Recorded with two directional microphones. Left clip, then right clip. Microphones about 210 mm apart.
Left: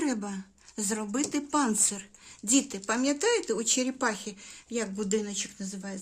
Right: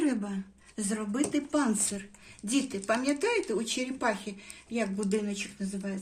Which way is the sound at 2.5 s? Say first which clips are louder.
Left 1 dB; 55° left (ahead or behind).